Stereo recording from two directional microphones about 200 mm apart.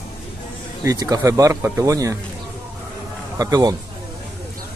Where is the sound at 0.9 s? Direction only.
15° right (ahead or behind).